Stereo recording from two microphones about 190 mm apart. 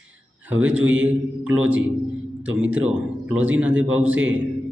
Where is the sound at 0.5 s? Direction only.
90° right.